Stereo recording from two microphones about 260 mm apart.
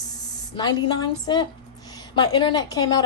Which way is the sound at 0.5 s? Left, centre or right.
Centre.